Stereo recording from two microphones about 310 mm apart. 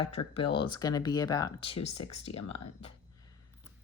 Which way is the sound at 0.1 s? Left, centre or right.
Centre.